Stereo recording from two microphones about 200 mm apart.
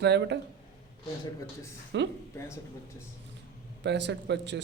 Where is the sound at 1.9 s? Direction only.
65° right (ahead or behind).